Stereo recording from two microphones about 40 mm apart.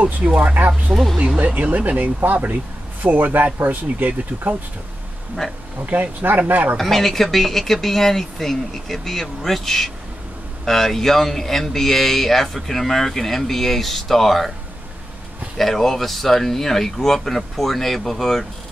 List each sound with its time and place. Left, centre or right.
0.0 s speech: right
5.9 s speech: right
6.8 s speech: centre
15.5 s speech: centre